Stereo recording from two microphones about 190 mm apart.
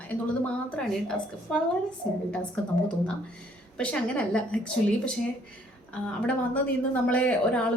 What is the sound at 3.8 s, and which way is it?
A woman's voice, 5° left (ahead or behind).